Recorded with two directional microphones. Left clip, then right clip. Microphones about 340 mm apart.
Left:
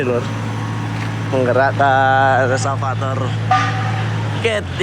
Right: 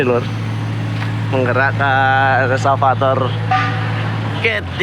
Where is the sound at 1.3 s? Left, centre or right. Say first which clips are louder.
Left 1 dB; centre.